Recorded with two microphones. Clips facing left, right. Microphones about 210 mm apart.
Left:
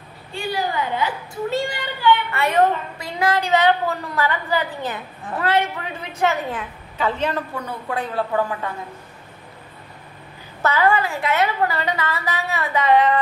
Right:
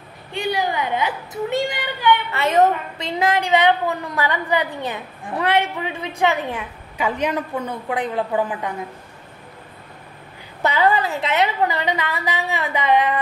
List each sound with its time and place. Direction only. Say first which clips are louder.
0.3 s a woman's voice: right 2 dB; 20° right (ahead or behind)
10.6 s a woman's voice: even; 15° right (ahead or behind)